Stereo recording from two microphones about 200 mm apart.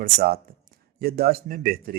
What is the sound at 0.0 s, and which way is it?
Speech, 50° right (ahead or behind).